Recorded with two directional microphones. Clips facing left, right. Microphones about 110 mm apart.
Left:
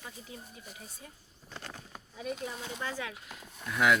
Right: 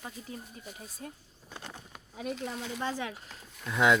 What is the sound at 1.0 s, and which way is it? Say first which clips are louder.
Speech: right 8 dB; 55° right (ahead or behind).